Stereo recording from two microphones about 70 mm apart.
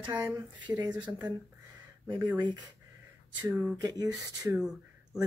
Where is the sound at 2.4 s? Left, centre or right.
Right.